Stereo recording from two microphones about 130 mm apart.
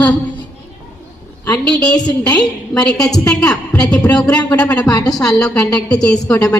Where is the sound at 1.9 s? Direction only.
30° left (ahead or behind).